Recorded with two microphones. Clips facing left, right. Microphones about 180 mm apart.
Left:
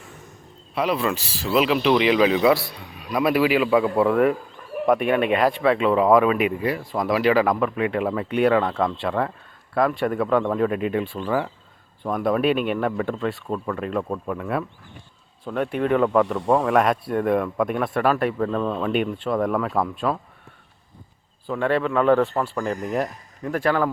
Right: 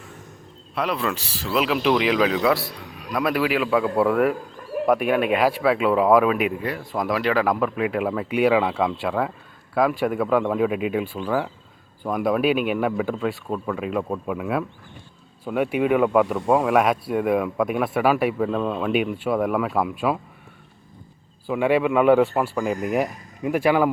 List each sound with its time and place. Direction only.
0.8 s speech: centre (ahead or behind)
21.4 s speech: 10° right (ahead or behind)